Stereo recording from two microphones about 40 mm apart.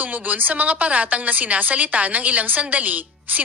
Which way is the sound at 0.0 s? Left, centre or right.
Right.